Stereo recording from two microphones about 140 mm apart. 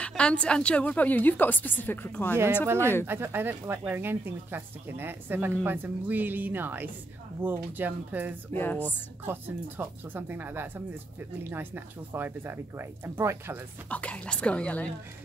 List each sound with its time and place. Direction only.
0.0 s a woman's voice: 10° left (ahead or behind)
2.3 s speech: 15° right (ahead or behind)
2.8 s a woman's voice: 15° left (ahead or behind)
3.1 s speech: 15° right (ahead or behind)
8.5 s a woman's voice: 15° left (ahead or behind)
9.2 s speech: 15° right (ahead or behind)
13.8 s a woman's voice: 10° left (ahead or behind)